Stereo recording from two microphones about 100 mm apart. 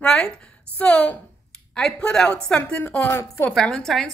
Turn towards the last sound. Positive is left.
turn(degrees=5)  # may be behind; listen again after turning